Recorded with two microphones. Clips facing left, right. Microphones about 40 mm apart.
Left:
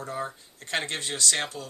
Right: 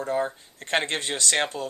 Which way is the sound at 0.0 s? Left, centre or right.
Right.